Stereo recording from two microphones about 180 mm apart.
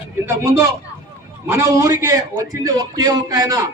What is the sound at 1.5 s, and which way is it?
A man's voice, 20° right (ahead or behind).